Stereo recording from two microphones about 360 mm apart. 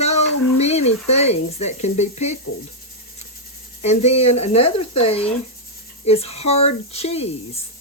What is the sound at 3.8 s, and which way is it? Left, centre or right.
Speech, centre.